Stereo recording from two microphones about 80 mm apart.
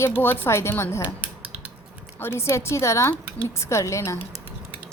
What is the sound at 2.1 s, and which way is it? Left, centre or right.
Speech, left.